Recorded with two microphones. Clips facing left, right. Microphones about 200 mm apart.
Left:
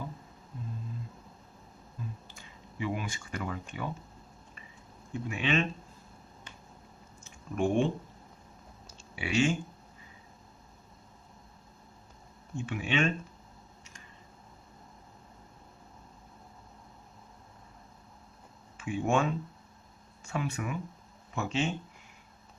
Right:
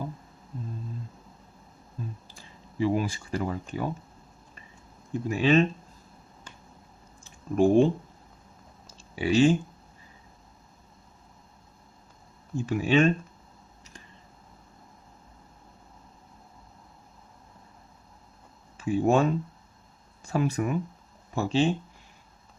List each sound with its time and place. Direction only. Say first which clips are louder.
2.2 s speech: right 1 dB; 35° right (ahead or behind)
5.1 s speech: right 8 dB; 35° right (ahead or behind)
7.3 s a sound: right 8 dB; 35° right (ahead or behind)
9.1 s speech: right 7 dB; 35° right (ahead or behind)
12.5 s speech: right 8 dB; 35° right (ahead or behind)
18.8 s speech: right 6 dB; 35° right (ahead or behind)